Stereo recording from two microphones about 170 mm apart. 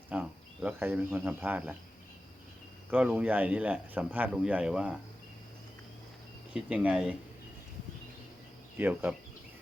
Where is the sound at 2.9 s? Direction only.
5° right (ahead or behind).